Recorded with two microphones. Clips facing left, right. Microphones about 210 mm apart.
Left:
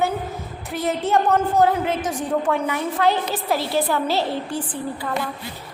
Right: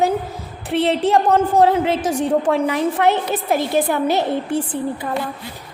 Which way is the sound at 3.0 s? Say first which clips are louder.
Right 3 dB; 25° right (ahead or behind).